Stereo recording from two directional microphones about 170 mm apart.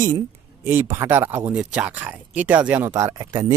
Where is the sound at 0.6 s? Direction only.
15° right (ahead or behind).